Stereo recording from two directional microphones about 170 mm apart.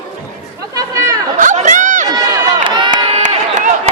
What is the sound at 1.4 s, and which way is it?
Chatter, 45° right (ahead or behind).